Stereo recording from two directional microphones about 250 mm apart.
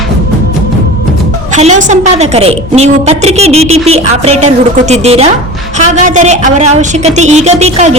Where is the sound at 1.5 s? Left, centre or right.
Right.